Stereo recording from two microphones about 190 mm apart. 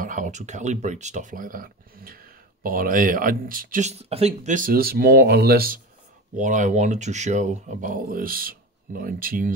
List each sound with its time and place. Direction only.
0.0 s speech: 40° right (ahead or behind)
4.0 s speech: 30° right (ahead or behind); by 5.8 s 55° right (ahead or behind)
6.3 s speech: 40° right (ahead or behind)